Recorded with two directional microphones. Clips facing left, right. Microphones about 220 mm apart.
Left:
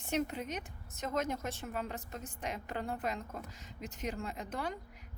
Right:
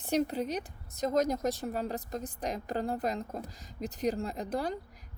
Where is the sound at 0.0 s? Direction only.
35° right (ahead or behind).